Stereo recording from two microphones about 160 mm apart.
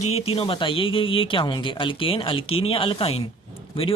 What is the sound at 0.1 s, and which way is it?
Speech, 40° left (ahead or behind).